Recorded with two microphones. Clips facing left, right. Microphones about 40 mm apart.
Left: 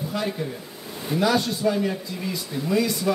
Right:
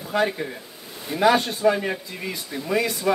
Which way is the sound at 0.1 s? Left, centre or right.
Right.